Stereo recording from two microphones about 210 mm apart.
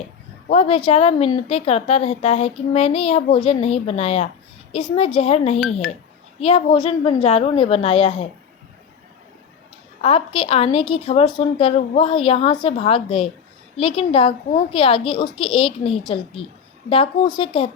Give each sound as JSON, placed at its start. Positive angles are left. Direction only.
{"t": 0.4, "sound": "a woman's voice", "side_deg": 30}
{"t": 10.0, "sound": "a woman's voice", "side_deg": 25}